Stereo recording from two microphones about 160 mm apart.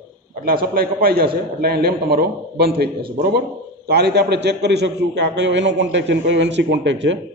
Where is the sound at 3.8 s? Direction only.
90° right.